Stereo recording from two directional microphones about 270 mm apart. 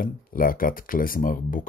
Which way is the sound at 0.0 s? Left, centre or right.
Left.